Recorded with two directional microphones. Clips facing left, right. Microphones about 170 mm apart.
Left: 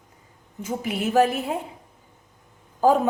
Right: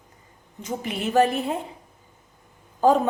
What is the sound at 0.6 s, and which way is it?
A woman's voice, 5° left (ahead or behind).